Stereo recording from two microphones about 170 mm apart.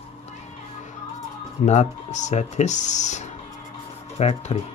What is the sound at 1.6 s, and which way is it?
Speech, 45° left (ahead or behind).